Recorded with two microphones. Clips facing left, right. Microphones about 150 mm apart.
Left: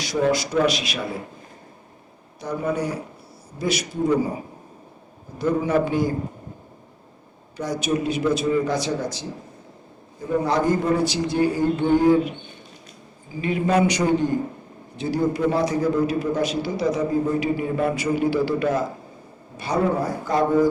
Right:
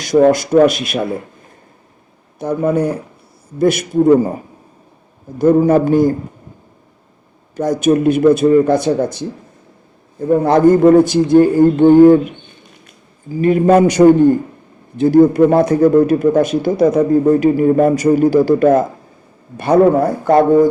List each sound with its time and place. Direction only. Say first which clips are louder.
0.0 s a man's voice: right 10 dB; 50° right (ahead or behind)
2.4 s a man's voice: right 9 dB; 55° right (ahead or behind)
5.4 s a man's voice: right 10 dB; 45° right (ahead or behind)
7.5 s a man's voice: right 11 dB; 50° right (ahead or behind)